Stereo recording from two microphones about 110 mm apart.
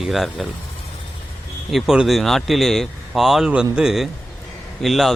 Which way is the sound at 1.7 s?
Centre (ahead or behind).